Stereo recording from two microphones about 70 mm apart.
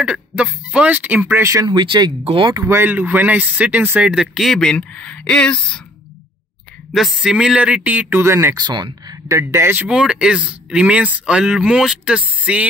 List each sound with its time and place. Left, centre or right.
0.0 s speech: centre
1.6 s speech: right
2.6 s speech: right
4.0 s speech: centre
4.5 s speech: centre
6.9 s speech: centre
7.3 s speech: centre
8.2 s speech: right
8.5 s speech: right
9.3 s speech: right
9.8 s speech: centre